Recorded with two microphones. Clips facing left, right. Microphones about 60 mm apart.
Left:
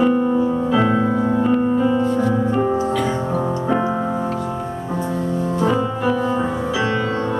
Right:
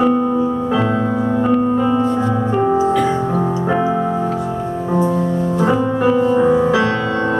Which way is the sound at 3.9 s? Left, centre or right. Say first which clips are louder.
Right 4 dB; right.